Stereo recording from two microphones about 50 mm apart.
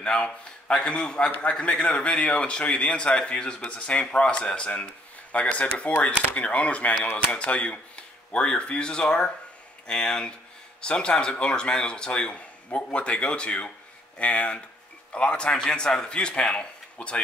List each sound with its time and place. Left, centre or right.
0.0 s a man's voice: left